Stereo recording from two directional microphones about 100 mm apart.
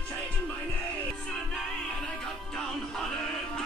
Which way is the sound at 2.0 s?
5° left (ahead or behind).